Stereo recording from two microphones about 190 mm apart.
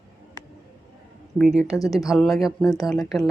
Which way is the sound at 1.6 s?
20° left (ahead or behind).